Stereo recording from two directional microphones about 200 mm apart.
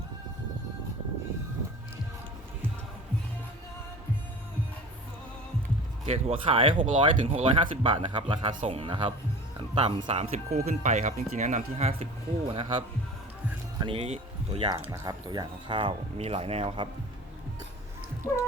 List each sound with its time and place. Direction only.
6.1 s speech: 30° right (ahead or behind)